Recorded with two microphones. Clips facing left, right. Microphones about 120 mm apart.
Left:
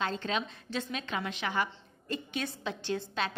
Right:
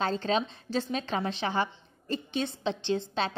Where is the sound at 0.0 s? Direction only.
35° right (ahead or behind).